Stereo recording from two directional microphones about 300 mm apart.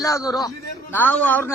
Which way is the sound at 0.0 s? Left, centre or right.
Centre.